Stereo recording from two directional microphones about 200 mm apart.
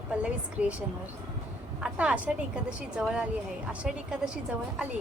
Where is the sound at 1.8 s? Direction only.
5° right (ahead or behind).